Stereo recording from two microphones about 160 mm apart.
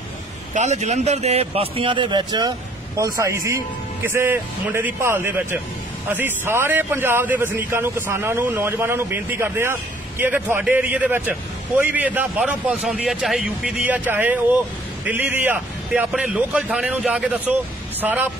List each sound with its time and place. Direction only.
0.6 s a man's voice: 45° right (ahead or behind); by 18.3 s 10° right (ahead or behind)